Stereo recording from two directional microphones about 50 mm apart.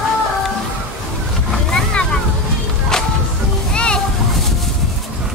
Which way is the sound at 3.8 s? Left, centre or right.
Centre.